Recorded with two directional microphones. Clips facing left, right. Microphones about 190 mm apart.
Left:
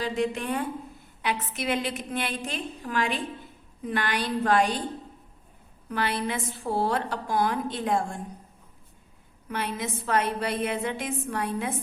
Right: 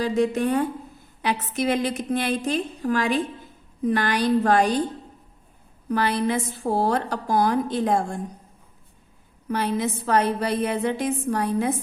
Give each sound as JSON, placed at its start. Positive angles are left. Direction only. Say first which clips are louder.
{"t": 0.0, "sound": "a woman's voice", "louder": "right 6 dB", "side_deg": -40}
{"t": 5.9, "sound": "a woman's voice", "louder": "right 6 dB", "side_deg": -40}
{"t": 9.5, "sound": "a woman's voice", "louder": "right 7 dB", "side_deg": -35}